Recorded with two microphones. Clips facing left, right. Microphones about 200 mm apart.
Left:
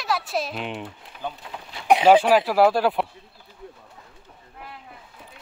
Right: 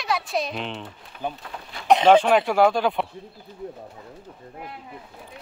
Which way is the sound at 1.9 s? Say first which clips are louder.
Even; 10° left (ahead or behind).